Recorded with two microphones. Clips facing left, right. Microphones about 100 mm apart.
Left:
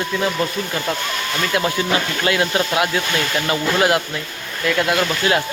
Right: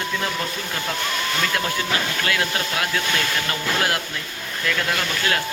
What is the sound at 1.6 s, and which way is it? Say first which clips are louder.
Speech: left 5 dB; 20° left (ahead or behind).